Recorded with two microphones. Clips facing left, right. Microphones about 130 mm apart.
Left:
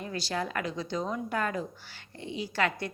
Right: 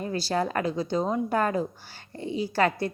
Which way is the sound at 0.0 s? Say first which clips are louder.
Right 6 dB; 35° right (ahead or behind).